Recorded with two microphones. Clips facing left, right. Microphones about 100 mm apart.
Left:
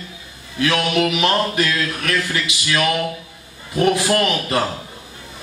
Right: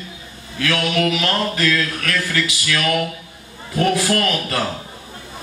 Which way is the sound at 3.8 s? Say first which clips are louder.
Left 1 dB; 20° left (ahead or behind).